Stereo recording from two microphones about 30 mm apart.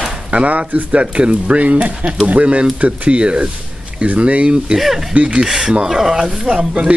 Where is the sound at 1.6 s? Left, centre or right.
Right.